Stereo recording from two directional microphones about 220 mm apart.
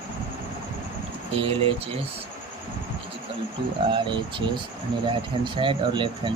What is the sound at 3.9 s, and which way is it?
Speech, 20° right (ahead or behind).